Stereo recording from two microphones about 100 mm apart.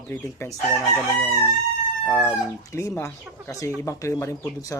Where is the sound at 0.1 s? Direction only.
25° left (ahead or behind).